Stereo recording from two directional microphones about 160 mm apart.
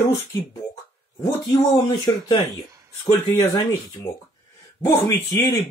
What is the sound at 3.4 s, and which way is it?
Speech, 25° left (ahead or behind).